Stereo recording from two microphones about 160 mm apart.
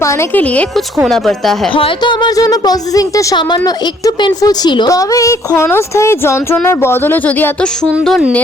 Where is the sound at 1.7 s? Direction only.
30° left (ahead or behind); by 7.9 s 10° left (ahead or behind).